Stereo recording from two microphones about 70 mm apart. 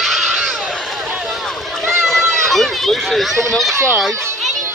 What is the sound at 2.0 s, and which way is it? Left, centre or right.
Run, centre.